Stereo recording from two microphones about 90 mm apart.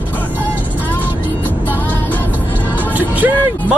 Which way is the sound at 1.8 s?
20° left (ahead or behind).